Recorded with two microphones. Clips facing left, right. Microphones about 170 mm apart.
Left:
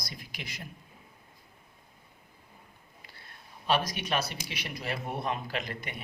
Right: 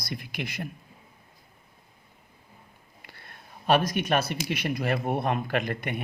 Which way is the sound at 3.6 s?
55° right (ahead or behind).